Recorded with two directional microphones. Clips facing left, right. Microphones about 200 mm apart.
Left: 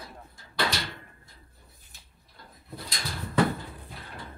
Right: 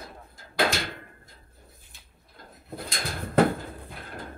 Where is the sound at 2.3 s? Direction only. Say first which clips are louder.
Right 4 dB; 50° right (ahead or behind).